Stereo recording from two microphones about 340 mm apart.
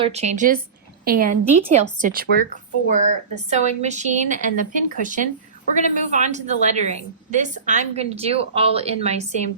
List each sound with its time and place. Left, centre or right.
0.0 s a woman's voice: centre
3.5 s a woman's voice: centre